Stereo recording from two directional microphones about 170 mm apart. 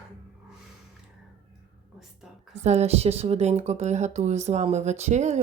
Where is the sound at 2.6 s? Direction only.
40° right (ahead or behind).